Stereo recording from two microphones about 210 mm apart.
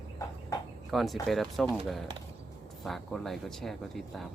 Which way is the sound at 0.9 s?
Centre (ahead or behind).